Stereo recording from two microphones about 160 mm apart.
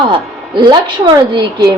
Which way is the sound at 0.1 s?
30° right (ahead or behind).